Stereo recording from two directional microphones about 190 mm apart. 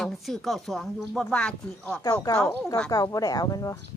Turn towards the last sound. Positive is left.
turn(degrees=20)  # may be behind; listen again after turning